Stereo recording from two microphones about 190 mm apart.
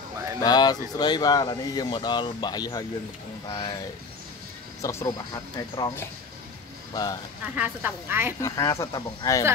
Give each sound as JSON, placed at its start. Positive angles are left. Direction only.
{"t": 0.4, "sound": "speech", "side_deg": 20}
{"t": 4.8, "sound": "speech", "side_deg": 20}
{"t": 7.5, "sound": "speech", "side_deg": -10}
{"t": 8.4, "sound": "speech", "side_deg": 15}